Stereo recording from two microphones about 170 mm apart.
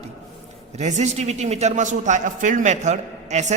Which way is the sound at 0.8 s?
45° right (ahead or behind).